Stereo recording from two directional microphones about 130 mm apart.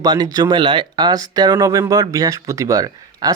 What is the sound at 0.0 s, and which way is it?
Speech, 30° right (ahead or behind).